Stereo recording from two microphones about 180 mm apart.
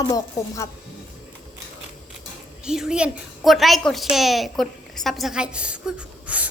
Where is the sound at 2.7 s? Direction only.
5° right (ahead or behind).